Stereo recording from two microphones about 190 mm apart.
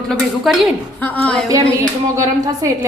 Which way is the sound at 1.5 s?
15° right (ahead or behind).